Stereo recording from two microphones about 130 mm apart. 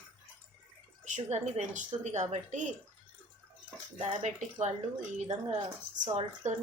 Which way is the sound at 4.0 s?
60° right (ahead or behind).